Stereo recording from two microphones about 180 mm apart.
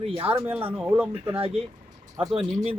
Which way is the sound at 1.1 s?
30° right (ahead or behind).